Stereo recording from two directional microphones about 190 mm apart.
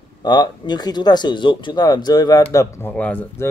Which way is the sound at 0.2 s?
25° left (ahead or behind).